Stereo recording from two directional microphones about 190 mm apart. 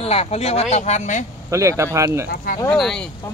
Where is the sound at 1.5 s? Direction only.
15° right (ahead or behind).